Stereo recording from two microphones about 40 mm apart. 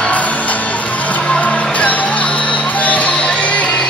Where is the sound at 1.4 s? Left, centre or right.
Left.